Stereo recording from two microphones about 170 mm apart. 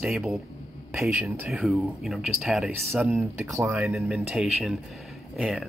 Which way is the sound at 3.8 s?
5° right (ahead or behind).